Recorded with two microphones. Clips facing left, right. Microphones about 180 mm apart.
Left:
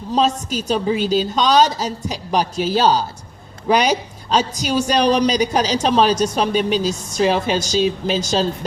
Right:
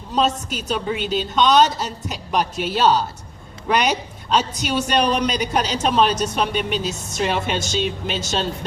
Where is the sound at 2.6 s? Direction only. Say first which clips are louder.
Left 1 dB; 35° left (ahead or behind).